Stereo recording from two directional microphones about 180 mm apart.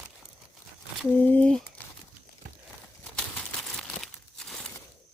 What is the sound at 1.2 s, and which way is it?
Speech, 5° left (ahead or behind).